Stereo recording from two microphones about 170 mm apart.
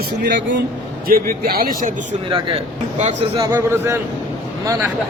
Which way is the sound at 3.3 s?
15° right (ahead or behind).